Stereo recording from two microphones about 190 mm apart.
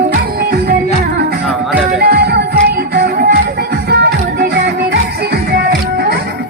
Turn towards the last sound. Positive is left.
turn(degrees=-55)  # may be behind; listen again after turning